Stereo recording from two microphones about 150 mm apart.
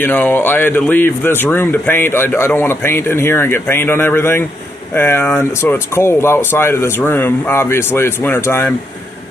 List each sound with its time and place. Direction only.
0.0 s speech: 10° left (ahead or behind)